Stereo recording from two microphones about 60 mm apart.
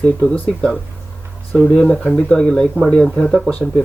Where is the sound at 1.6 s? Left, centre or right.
Centre.